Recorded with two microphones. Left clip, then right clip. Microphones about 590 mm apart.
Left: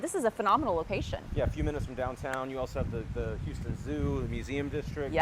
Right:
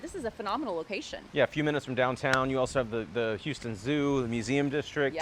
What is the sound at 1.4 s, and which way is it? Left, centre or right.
Speech, right.